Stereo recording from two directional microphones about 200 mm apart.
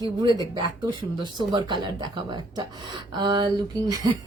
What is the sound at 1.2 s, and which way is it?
Speech, 20° right (ahead or behind).